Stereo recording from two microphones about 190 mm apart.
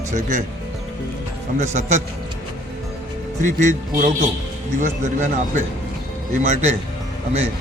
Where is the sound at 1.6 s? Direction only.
40° right (ahead or behind).